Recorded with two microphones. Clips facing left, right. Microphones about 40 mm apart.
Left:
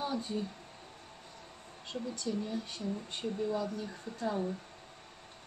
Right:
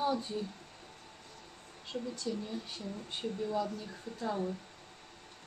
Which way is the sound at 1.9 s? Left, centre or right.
Centre.